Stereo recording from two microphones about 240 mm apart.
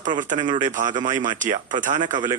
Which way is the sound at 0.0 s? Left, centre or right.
Right.